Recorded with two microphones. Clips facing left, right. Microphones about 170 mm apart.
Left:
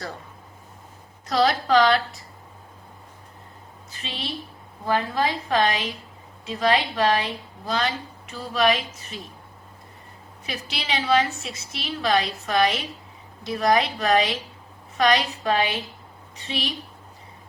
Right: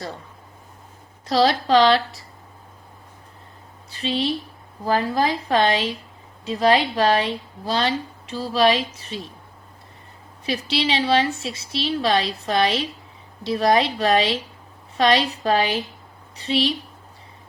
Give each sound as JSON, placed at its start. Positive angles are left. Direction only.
{"t": 1.3, "sound": "a woman's voice", "side_deg": -30}
{"t": 3.9, "sound": "a woman's voice", "side_deg": -35}
{"t": 10.4, "sound": "a woman's voice", "side_deg": -30}